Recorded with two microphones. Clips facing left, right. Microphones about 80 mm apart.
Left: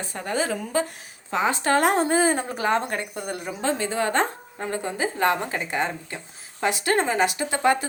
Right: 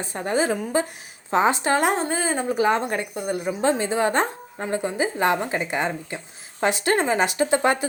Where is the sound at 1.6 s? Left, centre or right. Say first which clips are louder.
Left 1 dB; centre.